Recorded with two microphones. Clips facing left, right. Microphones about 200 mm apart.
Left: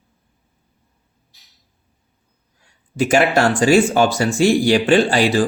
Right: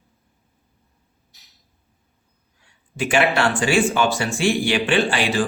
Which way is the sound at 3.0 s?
40° left (ahead or behind).